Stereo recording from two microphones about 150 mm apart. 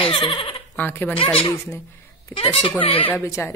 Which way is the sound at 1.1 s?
35° left (ahead or behind).